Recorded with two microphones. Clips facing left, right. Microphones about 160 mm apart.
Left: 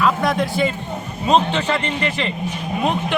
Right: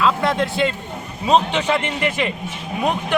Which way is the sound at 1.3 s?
10° right (ahead or behind).